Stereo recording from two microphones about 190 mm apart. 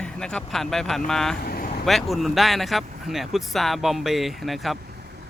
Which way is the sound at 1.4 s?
50° left (ahead or behind).